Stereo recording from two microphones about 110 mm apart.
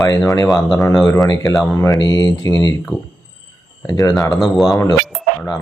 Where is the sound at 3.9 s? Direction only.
35° left (ahead or behind).